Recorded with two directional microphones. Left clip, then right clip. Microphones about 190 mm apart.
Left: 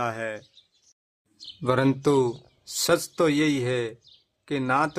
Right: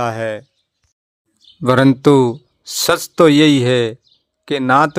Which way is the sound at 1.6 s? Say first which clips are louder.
Right 11 dB; 35° right (ahead or behind).